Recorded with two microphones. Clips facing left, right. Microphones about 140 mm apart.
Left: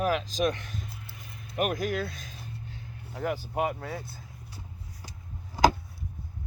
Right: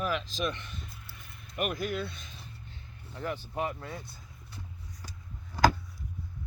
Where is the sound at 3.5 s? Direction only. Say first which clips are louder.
Left 4 dB; 55° left (ahead or behind).